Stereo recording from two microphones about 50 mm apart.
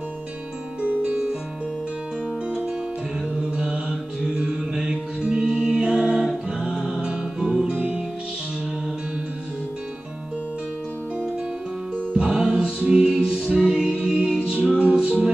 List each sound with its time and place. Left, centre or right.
3.3 s mantra: centre
7.7 s music: right
12.1 s music: right